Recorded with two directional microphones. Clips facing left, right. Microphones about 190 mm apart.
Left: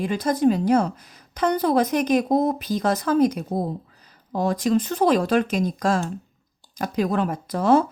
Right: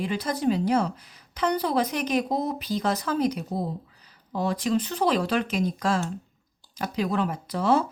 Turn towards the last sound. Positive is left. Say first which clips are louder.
# left 5 dB
turn(degrees=50)  # may be behind; listen again after turning